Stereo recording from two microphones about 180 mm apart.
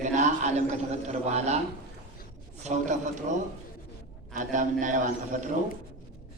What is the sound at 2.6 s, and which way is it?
Speech, 40° right (ahead or behind).